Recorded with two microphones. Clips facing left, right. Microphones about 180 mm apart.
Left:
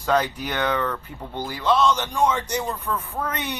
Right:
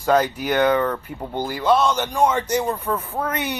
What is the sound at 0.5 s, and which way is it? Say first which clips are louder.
Speech: right 7 dB; 45° right (ahead or behind).